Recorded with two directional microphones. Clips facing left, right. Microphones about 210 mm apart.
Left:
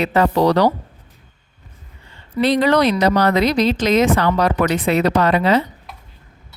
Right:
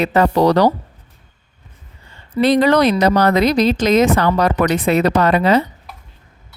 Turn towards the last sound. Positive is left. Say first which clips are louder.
# right 2 dB
turn(degrees=-45)  # may be behind; listen again after turning